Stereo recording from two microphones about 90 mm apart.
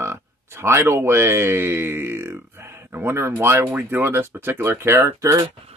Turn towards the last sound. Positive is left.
turn(degrees=-35)  # may be behind; listen again after turning